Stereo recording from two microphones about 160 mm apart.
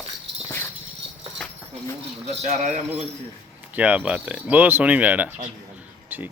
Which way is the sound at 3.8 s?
10° right (ahead or behind).